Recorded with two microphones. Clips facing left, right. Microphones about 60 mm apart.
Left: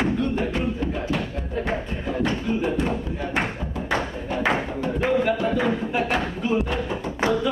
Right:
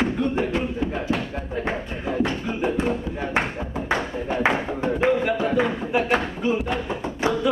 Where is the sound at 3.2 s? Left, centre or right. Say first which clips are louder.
Right 1 dB; right.